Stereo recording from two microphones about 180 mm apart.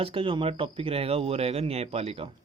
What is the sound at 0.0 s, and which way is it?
Speech, 30° right (ahead or behind).